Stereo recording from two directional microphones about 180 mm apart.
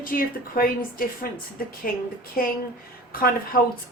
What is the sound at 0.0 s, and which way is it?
A woman's voice, 50° left (ahead or behind).